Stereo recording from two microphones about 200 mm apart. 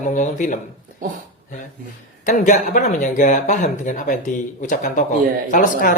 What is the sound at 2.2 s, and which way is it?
Speech, 40° left (ahead or behind).